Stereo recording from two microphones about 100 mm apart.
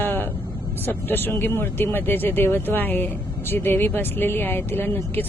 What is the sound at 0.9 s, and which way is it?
Speech, 20° left (ahead or behind).